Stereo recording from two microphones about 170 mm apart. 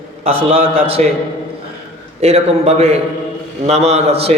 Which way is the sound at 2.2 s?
40° right (ahead or behind).